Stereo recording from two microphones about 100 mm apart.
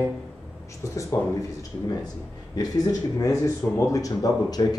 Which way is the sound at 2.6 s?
35° left (ahead or behind).